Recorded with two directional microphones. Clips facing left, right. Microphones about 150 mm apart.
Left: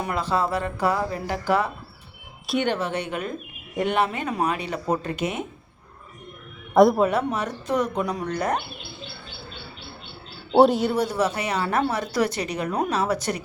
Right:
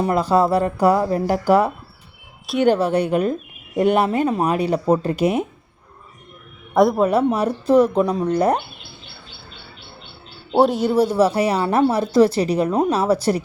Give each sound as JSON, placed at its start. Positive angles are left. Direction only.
{"t": 0.0, "sound": "speech", "side_deg": -40}
{"t": 6.7, "sound": "a man's voice", "side_deg": 0}
{"t": 7.1, "sound": "speech", "side_deg": -35}
{"t": 10.5, "sound": "a man's voice", "side_deg": 0}
{"t": 10.9, "sound": "speech", "side_deg": -30}